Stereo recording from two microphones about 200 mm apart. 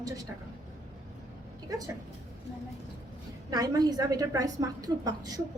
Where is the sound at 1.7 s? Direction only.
15° right (ahead or behind).